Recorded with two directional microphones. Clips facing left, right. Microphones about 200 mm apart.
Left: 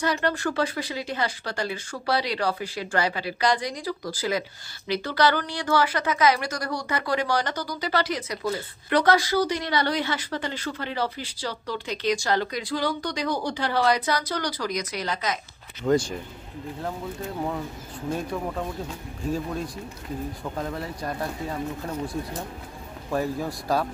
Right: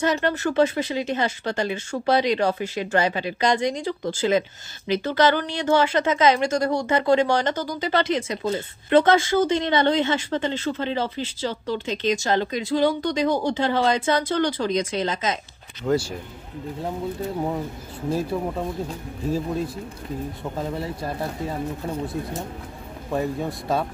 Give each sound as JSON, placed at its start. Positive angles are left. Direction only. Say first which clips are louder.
{"t": 0.0, "sound": "speech", "louder": "right 3 dB", "side_deg": -20}
{"t": 15.8, "sound": "speech", "louder": "even", "side_deg": -5}
{"t": 18.1, "sound": "speech", "louder": "right 4 dB", "side_deg": -5}
{"t": 20.5, "sound": "speech", "louder": "right 3 dB", "side_deg": -5}
{"t": 21.2, "sound": "speech", "louder": "right 2 dB", "side_deg": -30}
{"t": 23.1, "sound": "speech", "louder": "right 1 dB", "side_deg": -25}
{"t": 23.4, "sound": "speech", "louder": "right 1 dB", "side_deg": 0}